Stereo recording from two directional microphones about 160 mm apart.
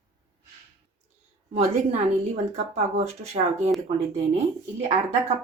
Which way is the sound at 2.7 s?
40° right (ahead or behind).